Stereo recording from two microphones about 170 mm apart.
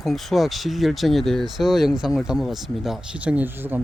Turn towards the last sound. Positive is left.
turn(degrees=-10)  # may be behind; listen again after turning